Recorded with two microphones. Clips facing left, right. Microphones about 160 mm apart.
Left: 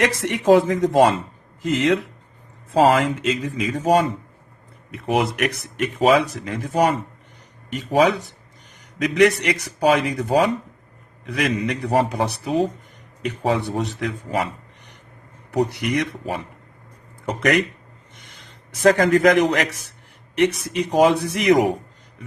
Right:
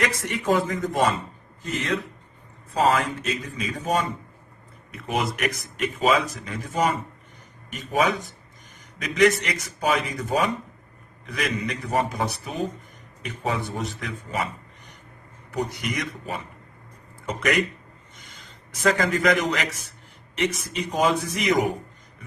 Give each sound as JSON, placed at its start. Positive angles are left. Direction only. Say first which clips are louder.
{"t": 0.0, "sound": "speech", "louder": "left 6 dB", "side_deg": 90}
{"t": 4.9, "sound": "a man's voice", "louder": "left 6 dB", "side_deg": 70}
{"t": 9.0, "sound": "a man's voice", "louder": "left 3 dB", "side_deg": 75}
{"t": 15.5, "sound": "a man's voice", "louder": "left 7 dB", "side_deg": 65}
{"t": 20.9, "sound": "speech", "louder": "left 6 dB", "side_deg": 65}